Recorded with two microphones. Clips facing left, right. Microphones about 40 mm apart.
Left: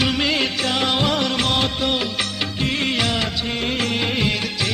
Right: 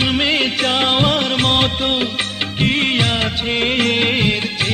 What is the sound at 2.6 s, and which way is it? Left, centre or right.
Music, right.